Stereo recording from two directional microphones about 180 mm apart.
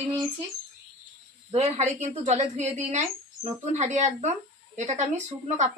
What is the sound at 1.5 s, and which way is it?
A woman's voice, 35° right (ahead or behind).